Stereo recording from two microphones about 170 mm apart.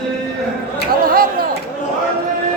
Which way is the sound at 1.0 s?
60° right (ahead or behind).